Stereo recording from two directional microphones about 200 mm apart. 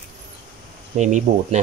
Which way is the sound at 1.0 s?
35° right (ahead or behind).